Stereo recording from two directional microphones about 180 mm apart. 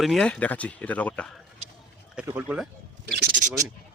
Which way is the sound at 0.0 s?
Centre (ahead or behind).